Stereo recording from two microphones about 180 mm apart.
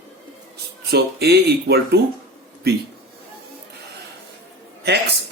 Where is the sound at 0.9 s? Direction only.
65° right (ahead or behind).